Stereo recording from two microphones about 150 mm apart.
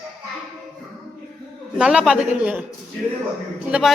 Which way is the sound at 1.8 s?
5° right (ahead or behind).